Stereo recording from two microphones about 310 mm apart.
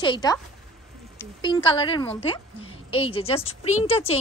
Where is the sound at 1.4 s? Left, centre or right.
Centre.